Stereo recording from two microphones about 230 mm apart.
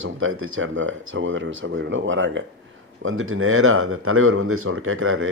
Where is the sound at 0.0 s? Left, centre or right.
Right.